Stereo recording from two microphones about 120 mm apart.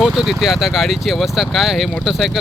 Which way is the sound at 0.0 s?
5° right (ahead or behind).